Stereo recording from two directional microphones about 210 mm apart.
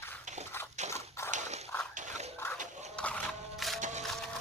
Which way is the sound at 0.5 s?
10° left (ahead or behind).